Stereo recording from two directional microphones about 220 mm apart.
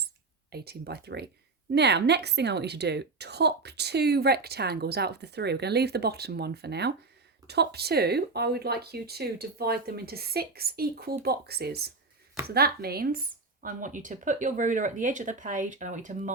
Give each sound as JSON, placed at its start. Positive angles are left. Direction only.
{"t": 0.5, "sound": "a woman's voice", "side_deg": -45}